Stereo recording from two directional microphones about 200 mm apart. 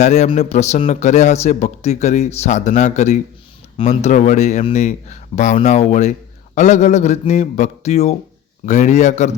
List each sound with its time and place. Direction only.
0.0 s speech: 35° left (ahead or behind)